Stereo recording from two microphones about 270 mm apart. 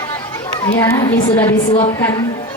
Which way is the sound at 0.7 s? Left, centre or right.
Centre.